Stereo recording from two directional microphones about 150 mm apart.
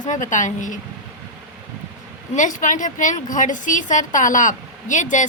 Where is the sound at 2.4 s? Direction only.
60° left (ahead or behind).